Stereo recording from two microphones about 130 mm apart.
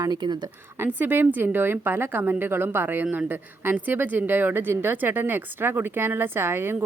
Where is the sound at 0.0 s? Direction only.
35° right (ahead or behind).